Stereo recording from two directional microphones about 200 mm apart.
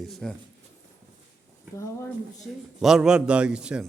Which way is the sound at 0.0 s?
Centre (ahead or behind).